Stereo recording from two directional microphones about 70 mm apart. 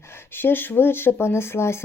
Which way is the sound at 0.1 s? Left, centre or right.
Left.